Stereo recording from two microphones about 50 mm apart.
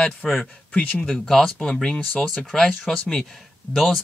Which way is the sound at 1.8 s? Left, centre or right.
Left.